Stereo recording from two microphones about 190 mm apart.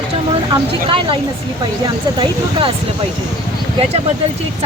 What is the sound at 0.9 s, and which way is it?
Speech, 25° right (ahead or behind).